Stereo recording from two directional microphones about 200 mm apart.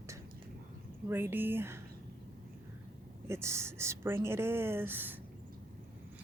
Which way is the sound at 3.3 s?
15° right (ahead or behind).